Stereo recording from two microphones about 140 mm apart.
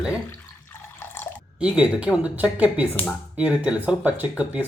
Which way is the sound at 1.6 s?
10° right (ahead or behind).